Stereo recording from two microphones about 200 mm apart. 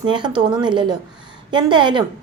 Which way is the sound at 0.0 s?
20° right (ahead or behind).